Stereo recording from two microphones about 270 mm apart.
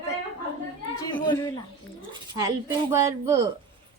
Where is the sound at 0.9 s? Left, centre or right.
Centre.